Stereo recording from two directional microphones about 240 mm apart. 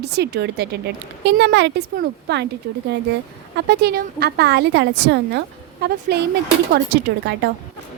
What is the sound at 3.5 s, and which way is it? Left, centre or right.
A woman's voice, right.